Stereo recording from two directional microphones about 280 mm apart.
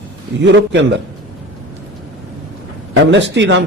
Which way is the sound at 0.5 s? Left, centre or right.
Right.